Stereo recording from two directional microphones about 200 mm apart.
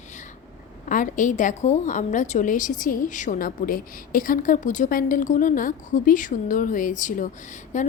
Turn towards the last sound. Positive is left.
turn(degrees=40)  # may be behind; listen again after turning